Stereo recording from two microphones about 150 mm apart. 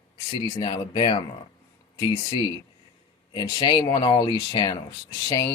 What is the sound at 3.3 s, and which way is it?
Speech, 30° left (ahead or behind).